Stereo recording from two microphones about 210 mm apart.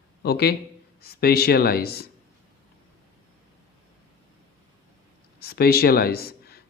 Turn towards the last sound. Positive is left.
turn(degrees=50)  # may be behind; listen again after turning